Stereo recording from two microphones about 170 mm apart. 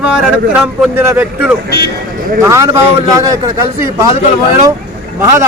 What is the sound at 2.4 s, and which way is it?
Speech, 20° right (ahead or behind).